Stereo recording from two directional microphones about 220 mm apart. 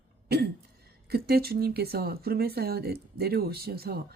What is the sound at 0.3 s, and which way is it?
Cough, 45° right (ahead or behind).